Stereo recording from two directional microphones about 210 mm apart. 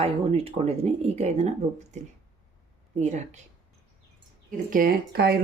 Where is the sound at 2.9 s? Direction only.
35° right (ahead or behind).